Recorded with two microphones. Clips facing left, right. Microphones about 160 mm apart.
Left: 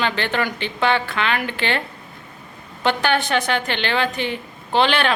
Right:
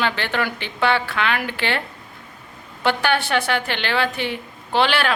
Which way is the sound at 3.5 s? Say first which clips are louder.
Left 1 dB; 10° right (ahead or behind).